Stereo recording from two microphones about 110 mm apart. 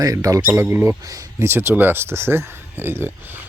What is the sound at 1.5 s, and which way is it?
Speech, 20° right (ahead or behind).